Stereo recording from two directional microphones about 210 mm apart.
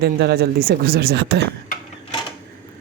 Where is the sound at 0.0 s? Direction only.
50° right (ahead or behind).